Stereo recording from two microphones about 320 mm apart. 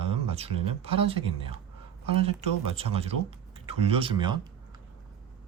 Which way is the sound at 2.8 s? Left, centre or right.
Centre.